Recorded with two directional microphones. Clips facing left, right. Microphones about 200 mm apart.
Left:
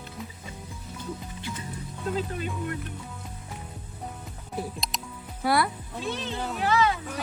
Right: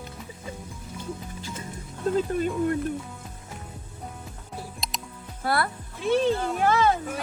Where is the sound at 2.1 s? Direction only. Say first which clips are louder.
Right 8 dB; 50° right (ahead or behind).